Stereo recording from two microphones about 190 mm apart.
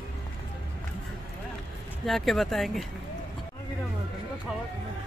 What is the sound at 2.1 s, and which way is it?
Speech, centre (ahead or behind).